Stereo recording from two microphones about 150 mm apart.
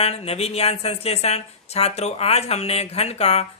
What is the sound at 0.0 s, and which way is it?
Speech, 40° left (ahead or behind).